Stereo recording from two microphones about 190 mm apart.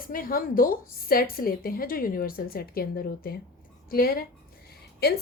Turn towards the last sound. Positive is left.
turn(degrees=55)  # may be behind; listen again after turning